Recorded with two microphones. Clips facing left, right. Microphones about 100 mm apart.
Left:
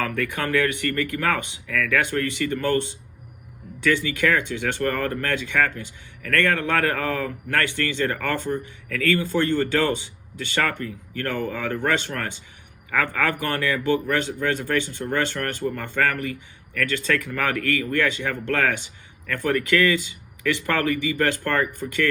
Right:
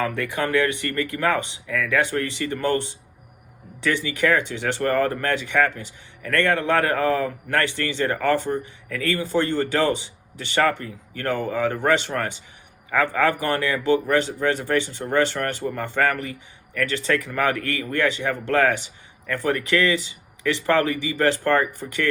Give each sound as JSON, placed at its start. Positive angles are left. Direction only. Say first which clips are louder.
{"t": 0.0, "sound": "speech", "louder": "right 1 dB", "side_deg": -20}
{"t": 3.8, "sound": "speech", "louder": "left 1 dB", "side_deg": -20}